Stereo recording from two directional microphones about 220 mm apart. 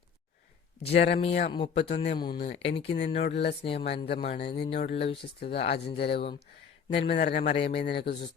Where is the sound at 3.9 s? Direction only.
45° left (ahead or behind).